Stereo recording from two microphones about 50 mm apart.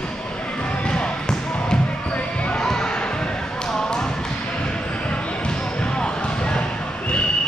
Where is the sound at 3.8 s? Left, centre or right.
Centre.